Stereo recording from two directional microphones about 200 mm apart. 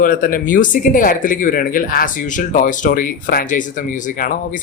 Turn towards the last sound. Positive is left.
turn(degrees=45)  # may be behind; listen again after turning